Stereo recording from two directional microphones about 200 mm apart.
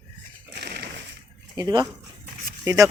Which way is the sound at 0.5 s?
50° right (ahead or behind).